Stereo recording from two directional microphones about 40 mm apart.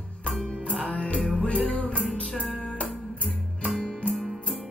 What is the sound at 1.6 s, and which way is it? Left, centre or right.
Music, left.